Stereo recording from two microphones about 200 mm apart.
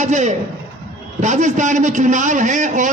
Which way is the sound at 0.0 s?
35° right (ahead or behind).